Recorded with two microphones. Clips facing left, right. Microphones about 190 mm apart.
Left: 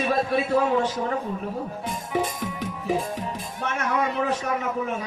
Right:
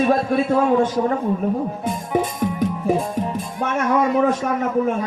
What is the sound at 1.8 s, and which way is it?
Music, 50° right (ahead or behind).